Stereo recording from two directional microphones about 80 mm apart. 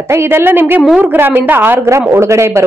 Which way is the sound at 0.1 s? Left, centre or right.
Right.